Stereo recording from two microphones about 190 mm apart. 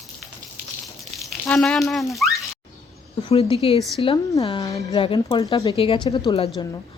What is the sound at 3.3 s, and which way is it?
Speech, 30° left (ahead or behind).